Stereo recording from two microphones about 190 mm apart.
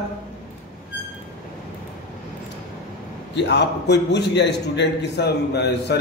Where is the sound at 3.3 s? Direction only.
65° left (ahead or behind).